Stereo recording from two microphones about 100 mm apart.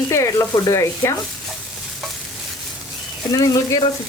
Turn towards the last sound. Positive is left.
turn(degrees=35)  # may be behind; listen again after turning